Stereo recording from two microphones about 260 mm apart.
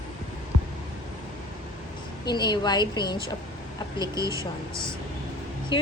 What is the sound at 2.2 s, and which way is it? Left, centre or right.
Speech, centre.